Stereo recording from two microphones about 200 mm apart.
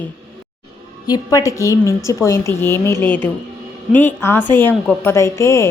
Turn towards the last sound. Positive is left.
turn(degrees=15)  # may be behind; listen again after turning